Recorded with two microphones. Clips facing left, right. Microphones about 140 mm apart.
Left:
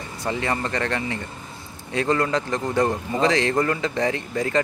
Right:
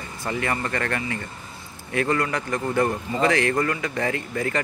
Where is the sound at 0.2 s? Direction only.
20° left (ahead or behind).